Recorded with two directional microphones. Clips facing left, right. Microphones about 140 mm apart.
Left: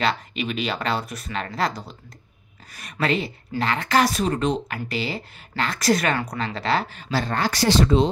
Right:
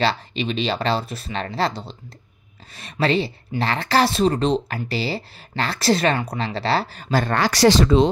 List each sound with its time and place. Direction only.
0.0 s speech: 30° right (ahead or behind); by 7.3 s 50° right (ahead or behind)
7.3 s speech: 90° right